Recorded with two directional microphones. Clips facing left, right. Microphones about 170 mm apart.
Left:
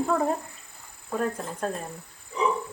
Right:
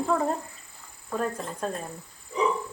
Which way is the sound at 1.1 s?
Centre (ahead or behind).